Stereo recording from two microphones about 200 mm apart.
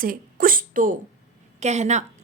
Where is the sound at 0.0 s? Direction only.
45° right (ahead or behind).